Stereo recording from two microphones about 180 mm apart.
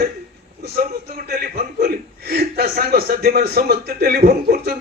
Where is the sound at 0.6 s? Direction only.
55° right (ahead or behind).